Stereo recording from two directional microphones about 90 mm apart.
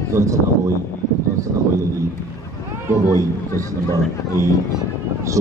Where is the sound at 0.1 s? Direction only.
35° right (ahead or behind).